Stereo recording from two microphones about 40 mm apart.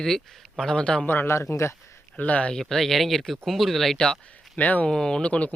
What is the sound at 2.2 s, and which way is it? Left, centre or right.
Speech, left.